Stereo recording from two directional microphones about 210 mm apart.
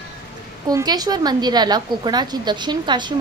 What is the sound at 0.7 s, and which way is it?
A woman's voice, 20° right (ahead or behind).